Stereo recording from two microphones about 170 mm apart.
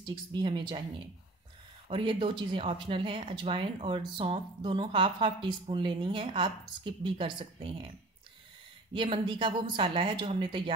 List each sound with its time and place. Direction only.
0.0 s a woman's voice: 25° right (ahead or behind)
1.9 s speech: 30° right (ahead or behind)
8.9 s a woman's voice: 30° right (ahead or behind)